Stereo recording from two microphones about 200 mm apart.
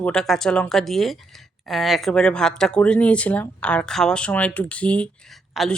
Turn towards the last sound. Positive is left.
turn(degrees=0)  # may be behind; listen again after turning